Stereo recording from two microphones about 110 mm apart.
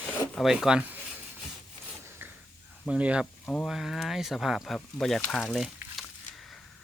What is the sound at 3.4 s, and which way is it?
Speech, 10° left (ahead or behind).